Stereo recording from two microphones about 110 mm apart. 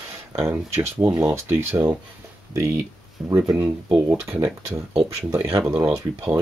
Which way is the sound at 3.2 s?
30° right (ahead or behind).